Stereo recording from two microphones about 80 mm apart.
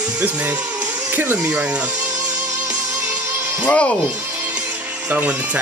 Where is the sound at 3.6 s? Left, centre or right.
Centre.